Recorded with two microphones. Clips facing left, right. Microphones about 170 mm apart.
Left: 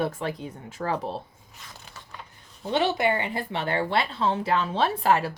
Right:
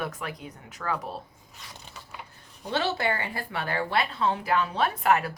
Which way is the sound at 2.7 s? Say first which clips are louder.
Left 4 dB; 20° left (ahead or behind).